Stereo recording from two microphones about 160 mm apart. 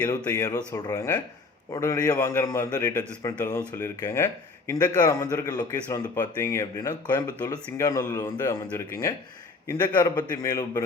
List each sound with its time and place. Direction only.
0.3 s a man's voice: 20° left (ahead or behind)